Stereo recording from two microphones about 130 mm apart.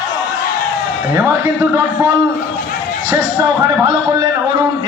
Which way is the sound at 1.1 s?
20° right (ahead or behind).